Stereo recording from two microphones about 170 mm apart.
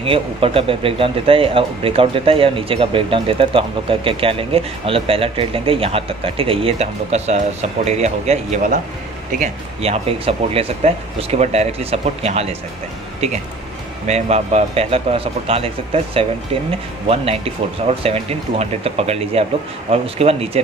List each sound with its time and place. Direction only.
0.0 s speech: 35° right (ahead or behind)